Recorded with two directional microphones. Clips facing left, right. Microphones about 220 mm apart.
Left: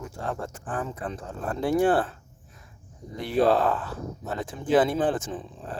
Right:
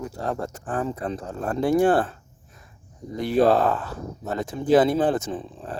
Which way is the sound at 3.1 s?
40° right (ahead or behind).